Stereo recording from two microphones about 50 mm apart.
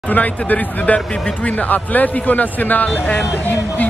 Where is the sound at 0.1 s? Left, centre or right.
Left.